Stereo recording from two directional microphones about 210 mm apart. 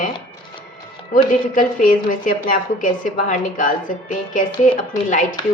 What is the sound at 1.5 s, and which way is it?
A woman's voice, 40° left (ahead or behind).